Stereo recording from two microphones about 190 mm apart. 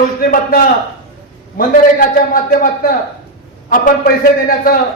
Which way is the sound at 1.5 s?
50° left (ahead or behind).